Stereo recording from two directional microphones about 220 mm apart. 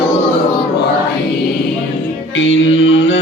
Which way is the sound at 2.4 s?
60° left (ahead or behind).